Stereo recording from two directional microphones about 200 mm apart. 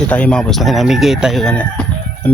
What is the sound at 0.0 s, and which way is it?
Speech, 5° left (ahead or behind).